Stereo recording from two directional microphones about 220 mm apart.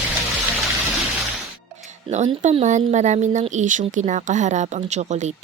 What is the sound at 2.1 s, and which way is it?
A woman's voice, 30° right (ahead or behind).